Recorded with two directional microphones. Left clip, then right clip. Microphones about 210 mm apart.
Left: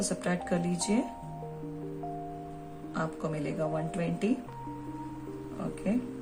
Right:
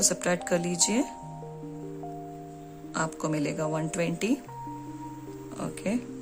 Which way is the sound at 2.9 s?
45° right (ahead or behind).